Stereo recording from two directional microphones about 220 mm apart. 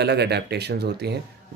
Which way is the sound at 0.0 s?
50° right (ahead or behind).